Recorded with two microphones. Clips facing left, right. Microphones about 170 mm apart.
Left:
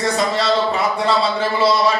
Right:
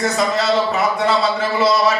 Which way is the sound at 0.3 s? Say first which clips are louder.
Right 1 dB; 30° left (ahead or behind).